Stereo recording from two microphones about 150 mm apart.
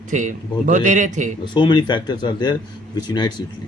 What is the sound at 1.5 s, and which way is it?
A man's voice, 30° left (ahead or behind).